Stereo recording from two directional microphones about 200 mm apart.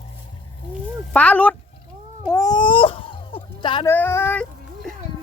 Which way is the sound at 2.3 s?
20° left (ahead or behind).